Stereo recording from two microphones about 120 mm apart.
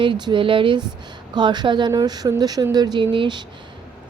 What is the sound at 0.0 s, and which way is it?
A woman's voice, 40° right (ahead or behind).